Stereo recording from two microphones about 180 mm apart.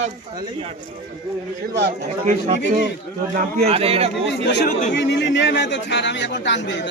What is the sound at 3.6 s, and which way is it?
Speech, 35° right (ahead or behind).